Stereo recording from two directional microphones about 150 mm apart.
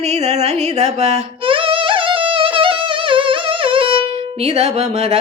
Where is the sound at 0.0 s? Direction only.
50° right (ahead or behind).